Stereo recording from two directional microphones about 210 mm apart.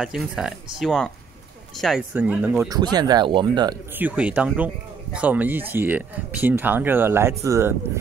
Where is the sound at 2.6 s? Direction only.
20° right (ahead or behind).